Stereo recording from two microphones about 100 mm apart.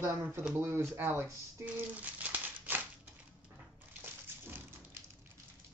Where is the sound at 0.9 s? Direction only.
25° right (ahead or behind).